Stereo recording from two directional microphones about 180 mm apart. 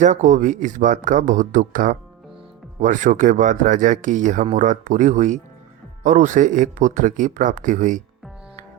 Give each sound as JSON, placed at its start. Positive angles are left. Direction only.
{"t": 0.0, "sound": "speech", "side_deg": -40}